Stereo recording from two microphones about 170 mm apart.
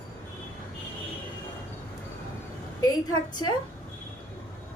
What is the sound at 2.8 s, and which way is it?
Speech, 20° left (ahead or behind).